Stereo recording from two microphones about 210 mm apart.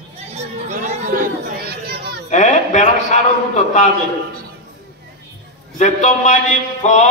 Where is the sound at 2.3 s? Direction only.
35° left (ahead or behind).